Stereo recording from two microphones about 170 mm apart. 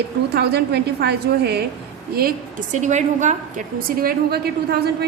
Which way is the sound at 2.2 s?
55° right (ahead or behind).